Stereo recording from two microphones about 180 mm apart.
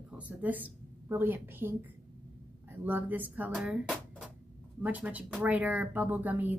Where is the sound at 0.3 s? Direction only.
10° right (ahead or behind).